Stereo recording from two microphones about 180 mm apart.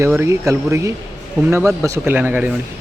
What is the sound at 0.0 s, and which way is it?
Speech, 15° right (ahead or behind).